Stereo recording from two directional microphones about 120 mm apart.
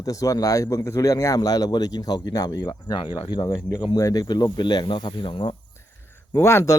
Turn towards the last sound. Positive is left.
turn(degrees=25)  # may be behind; listen again after turning